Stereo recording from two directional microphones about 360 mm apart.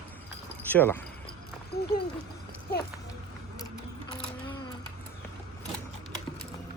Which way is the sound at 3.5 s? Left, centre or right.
Centre.